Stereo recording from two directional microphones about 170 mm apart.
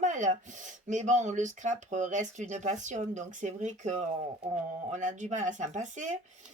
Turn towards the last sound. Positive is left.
turn(degrees=-45)  # may be behind; listen again after turning